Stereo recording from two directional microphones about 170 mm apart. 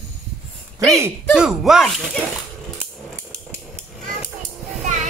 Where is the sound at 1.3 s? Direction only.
5° right (ahead or behind).